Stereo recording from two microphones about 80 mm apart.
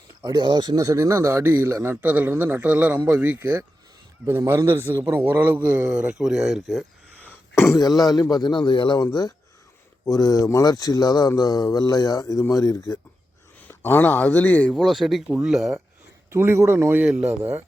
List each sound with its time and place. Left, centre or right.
0.3 s a man's voice: right; by 3.4 s centre
4.3 s a man's voice: right; by 6.8 s centre
7.5 s speech: left
7.8 s a man's voice: left
9.0 s speech: left
13.6 s a man's voice: left
14.7 s speech: centre
15.3 s speech: centre
15.5 s speech: centre
16.3 s speech: right
17.0 s speech: centre